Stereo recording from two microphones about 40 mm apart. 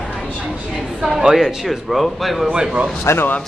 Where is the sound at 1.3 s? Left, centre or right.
Centre.